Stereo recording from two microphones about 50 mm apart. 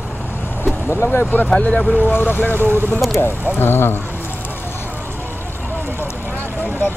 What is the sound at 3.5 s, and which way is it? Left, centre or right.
Speech, left.